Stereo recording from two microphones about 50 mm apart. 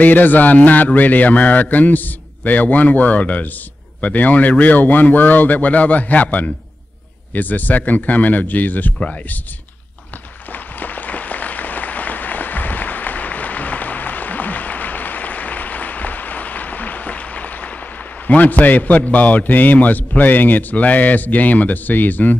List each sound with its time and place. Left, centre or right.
0.0 s a man's voice: left
10.5 s applause: left
18.2 s a man's voice: left